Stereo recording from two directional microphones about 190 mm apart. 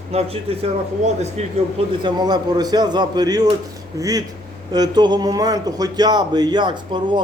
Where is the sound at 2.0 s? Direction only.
20° right (ahead or behind).